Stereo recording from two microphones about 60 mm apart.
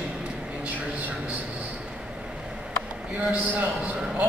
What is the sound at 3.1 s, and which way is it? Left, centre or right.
Speech, right.